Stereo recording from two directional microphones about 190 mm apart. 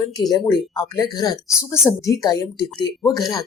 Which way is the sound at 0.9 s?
20° left (ahead or behind).